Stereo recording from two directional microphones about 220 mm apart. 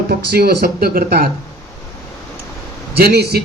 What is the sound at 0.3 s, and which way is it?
Speech, 45° right (ahead or behind).